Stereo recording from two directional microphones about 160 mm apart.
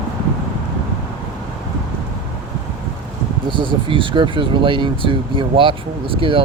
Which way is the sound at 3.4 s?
30° right (ahead or behind).